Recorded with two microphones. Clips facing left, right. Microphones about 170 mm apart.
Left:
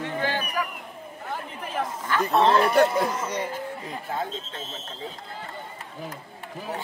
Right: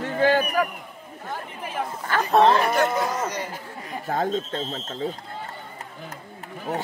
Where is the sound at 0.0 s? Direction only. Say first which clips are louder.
Right 7 dB; 45° right (ahead or behind).